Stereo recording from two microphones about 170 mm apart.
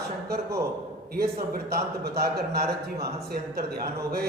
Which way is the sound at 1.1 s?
65° right (ahead or behind).